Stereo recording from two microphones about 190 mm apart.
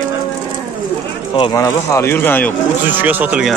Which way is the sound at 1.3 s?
20° left (ahead or behind).